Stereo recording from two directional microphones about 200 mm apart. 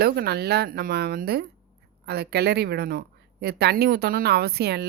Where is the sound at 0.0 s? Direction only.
50° right (ahead or behind).